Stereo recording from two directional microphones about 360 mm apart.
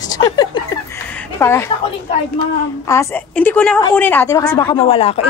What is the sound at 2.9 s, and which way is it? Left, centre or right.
A woman's voice, centre.